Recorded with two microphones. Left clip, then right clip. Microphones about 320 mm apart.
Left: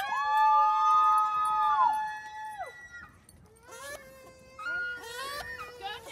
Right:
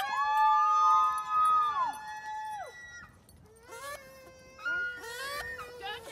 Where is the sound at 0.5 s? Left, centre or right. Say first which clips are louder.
Left 1 dB; right.